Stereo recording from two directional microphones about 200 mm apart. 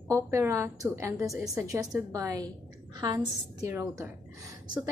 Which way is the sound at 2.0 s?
15° right (ahead or behind).